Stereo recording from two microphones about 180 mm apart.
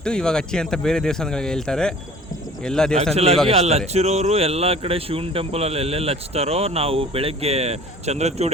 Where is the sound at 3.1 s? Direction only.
35° right (ahead or behind).